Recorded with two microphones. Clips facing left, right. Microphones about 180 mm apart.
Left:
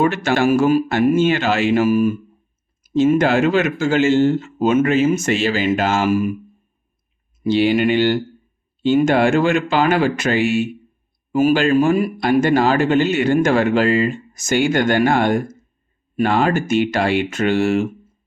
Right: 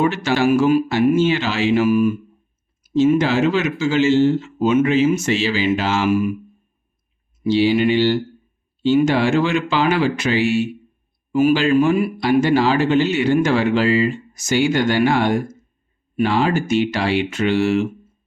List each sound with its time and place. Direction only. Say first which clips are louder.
0.0 s speech: left 1 dB; 50° left (ahead or behind)
7.4 s speech: even; 55° left (ahead or behind)